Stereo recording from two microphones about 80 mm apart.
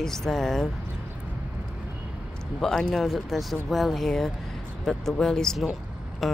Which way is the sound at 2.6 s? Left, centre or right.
Centre.